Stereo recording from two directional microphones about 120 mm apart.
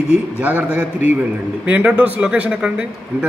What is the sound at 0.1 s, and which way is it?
Speech, 10° right (ahead or behind).